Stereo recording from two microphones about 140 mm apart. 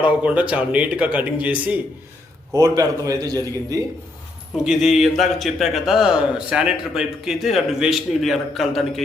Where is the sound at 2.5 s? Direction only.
25° right (ahead or behind).